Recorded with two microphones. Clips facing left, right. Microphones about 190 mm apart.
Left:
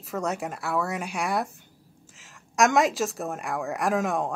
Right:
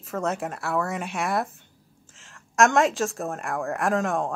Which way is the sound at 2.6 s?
Centre (ahead or behind).